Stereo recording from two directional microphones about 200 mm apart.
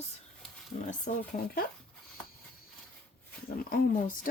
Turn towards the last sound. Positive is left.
turn(degrees=45)  # may be behind; listen again after turning